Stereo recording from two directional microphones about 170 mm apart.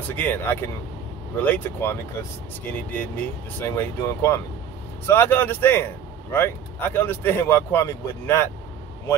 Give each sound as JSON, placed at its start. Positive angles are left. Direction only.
{"t": 0.0, "sound": "speech", "side_deg": 10}